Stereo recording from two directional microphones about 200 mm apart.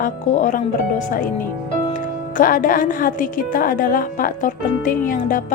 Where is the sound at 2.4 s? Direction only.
40° left (ahead or behind).